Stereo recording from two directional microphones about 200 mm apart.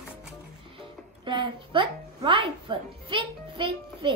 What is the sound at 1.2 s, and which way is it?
Speech, 25° right (ahead or behind).